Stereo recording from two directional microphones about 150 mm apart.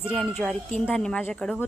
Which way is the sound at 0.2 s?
Centre (ahead or behind).